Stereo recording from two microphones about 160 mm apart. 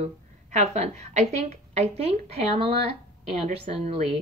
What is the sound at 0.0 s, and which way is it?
A woman's voice, 45° right (ahead or behind).